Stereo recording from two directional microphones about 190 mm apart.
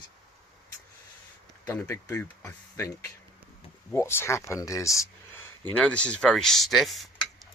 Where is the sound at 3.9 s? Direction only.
15° left (ahead or behind).